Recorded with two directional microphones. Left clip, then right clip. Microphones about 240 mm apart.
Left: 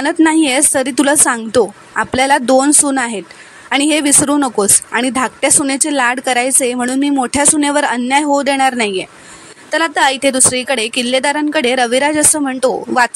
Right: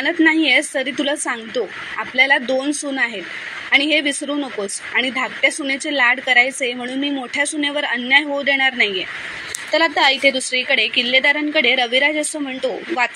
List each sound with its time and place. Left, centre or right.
0.0 s speech: left